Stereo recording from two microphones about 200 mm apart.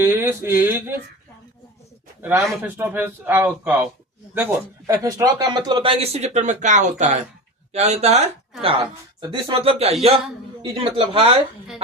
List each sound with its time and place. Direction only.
0.0 s a sound: 10° right (ahead or behind)
2.4 s a man's voice: 10° right (ahead or behind)
4.9 s speech: 15° right (ahead or behind)